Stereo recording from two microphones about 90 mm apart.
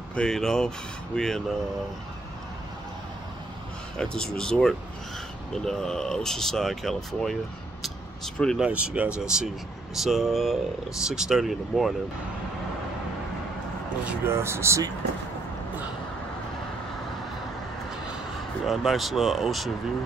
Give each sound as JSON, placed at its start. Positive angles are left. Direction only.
{"t": 0.1, "sound": "speech", "side_deg": 5}
{"t": 3.9, "sound": "speech", "side_deg": 10}
{"t": 8.5, "sound": "speech", "side_deg": -10}
{"t": 14.2, "sound": "speech", "side_deg": -30}
{"t": 18.7, "sound": "speech", "side_deg": 0}